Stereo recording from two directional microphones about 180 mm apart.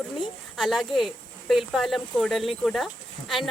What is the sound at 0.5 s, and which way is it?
Speech, centre (ahead or behind).